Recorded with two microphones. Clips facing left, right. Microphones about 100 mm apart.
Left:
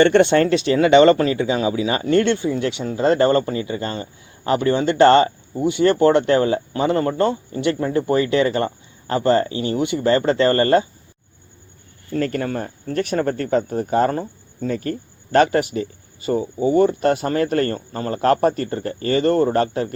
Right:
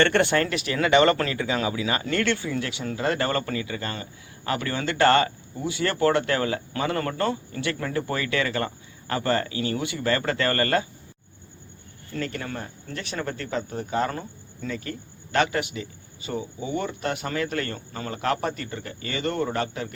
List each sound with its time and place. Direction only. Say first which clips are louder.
0.0 s speech: left 7 dB; 20° left (ahead or behind)
12.1 s speech: left 9 dB; 45° left (ahead or behind)